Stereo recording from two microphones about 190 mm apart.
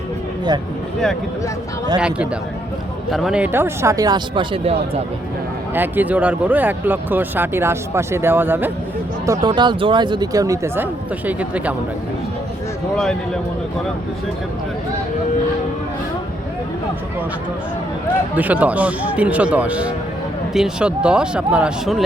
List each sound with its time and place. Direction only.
2.0 s speech: 5° right (ahead or behind); by 5.0 s 30° right (ahead or behind)
5.7 s speech: 10° right (ahead or behind)
13.0 s speech: 5° left (ahead or behind)
18.3 s speech: 10° right (ahead or behind)